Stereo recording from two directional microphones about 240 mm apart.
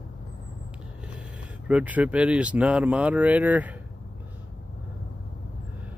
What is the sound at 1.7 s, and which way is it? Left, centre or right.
Speech, centre.